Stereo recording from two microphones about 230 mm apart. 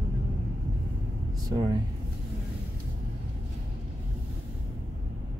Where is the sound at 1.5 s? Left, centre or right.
Centre.